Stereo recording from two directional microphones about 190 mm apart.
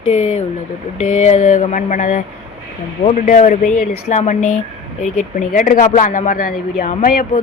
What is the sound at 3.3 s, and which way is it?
Speech, 40° left (ahead or behind).